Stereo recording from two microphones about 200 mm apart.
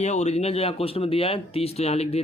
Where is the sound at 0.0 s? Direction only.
35° left (ahead or behind).